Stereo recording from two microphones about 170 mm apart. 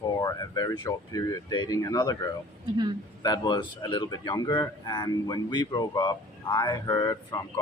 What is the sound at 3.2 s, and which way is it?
Speech, 25° left (ahead or behind).